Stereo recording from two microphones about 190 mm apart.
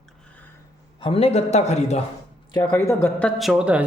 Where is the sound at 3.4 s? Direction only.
5° right (ahead or behind).